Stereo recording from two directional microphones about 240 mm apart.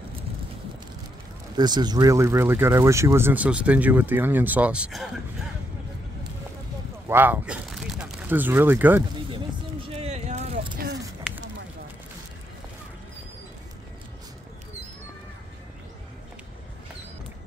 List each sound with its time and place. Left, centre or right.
1.6 s speech: centre
7.1 s speech: centre
9.8 s vehicle: right